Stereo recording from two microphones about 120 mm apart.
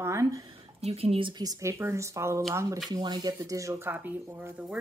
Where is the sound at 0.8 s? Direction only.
60° right (ahead or behind).